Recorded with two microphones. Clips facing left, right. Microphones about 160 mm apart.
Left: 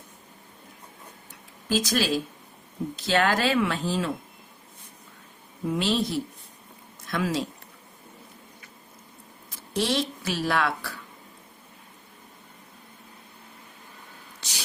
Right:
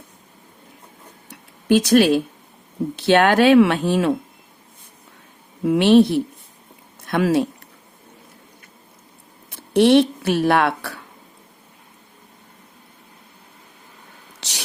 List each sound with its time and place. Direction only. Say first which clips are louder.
1.3 s a sound: right 10 dB; 70° right (ahead or behind)
2.9 s speech: right 8 dB; 70° right (ahead or behind)
5.6 s speech: right 12 dB; 70° right (ahead or behind)
9.5 s speech: right 13 dB; 65° right (ahead or behind)
14.4 s whispering: right 4 dB; 75° right (ahead or behind)